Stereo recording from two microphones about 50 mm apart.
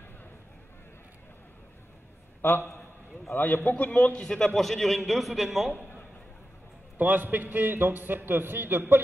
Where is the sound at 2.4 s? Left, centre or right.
Left.